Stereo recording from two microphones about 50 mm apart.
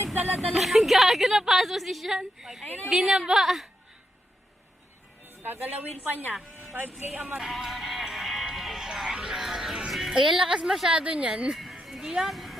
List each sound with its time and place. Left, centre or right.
0.0 s a sound: right
0.5 s a woman's voice: centre
2.6 s a woman's voice: left
2.9 s a woman's voice: centre
5.4 s speech: right
7.1 s music: right
7.3 s music: centre
10.3 s a woman's voice: centre
11.5 s a sound: centre
11.9 s speech: centre